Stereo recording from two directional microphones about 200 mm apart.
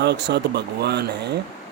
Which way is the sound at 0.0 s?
55° right (ahead or behind).